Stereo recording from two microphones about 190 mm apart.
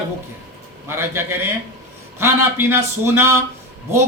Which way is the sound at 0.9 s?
15° right (ahead or behind).